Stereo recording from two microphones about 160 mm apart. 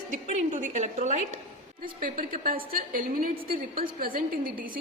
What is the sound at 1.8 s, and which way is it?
A woman's voice, 60° right (ahead or behind).